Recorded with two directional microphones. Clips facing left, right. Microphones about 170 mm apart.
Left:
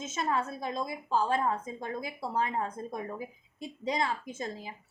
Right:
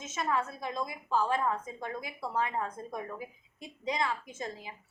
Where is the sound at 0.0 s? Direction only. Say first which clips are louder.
Left 1 dB; 25° left (ahead or behind).